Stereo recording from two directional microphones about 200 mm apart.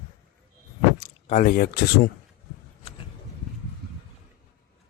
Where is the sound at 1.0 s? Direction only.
40° left (ahead or behind).